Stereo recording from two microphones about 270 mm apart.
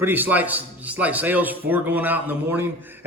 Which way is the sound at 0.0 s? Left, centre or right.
Centre.